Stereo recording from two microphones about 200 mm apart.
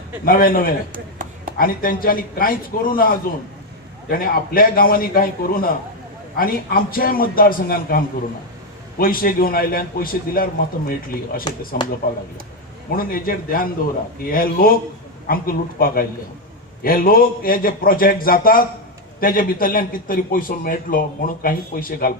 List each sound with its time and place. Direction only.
0.3 s a man's voice: 45° left (ahead or behind)
12.9 s a man's voice: 45° left (ahead or behind)